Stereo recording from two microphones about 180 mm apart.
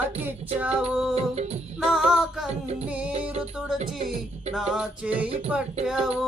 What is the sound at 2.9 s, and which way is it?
Speech, 5° right (ahead or behind).